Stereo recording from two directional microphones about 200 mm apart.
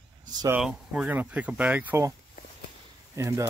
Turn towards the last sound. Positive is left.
turn(degrees=-15)  # may be behind; listen again after turning